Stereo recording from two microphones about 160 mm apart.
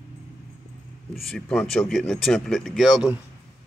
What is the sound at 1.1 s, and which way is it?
A man's voice, 5° left (ahead or behind).